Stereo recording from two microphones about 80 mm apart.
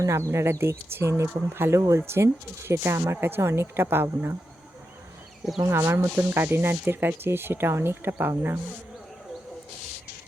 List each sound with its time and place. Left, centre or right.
0.0 s speech: right
5.6 s speech: right